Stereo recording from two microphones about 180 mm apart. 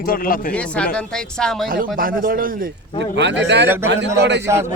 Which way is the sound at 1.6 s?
55° right (ahead or behind).